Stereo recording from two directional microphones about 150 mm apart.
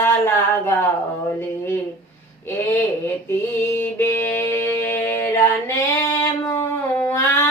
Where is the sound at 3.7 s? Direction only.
15° left (ahead or behind).